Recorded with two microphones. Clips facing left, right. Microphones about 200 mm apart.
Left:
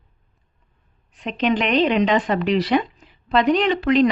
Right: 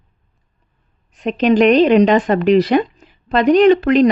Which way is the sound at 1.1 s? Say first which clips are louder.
Right 7 dB; 45° right (ahead or behind).